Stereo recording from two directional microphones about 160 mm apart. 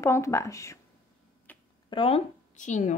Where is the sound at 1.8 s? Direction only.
35° left (ahead or behind); by 3.0 s 50° left (ahead or behind).